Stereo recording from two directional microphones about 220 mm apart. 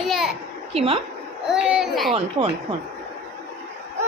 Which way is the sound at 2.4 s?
20° right (ahead or behind).